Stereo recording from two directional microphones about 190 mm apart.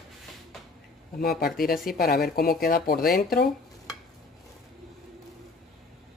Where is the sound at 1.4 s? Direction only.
50° left (ahead or behind).